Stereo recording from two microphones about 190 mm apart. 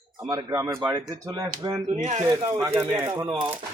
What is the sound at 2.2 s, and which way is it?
Speech, 25° right (ahead or behind).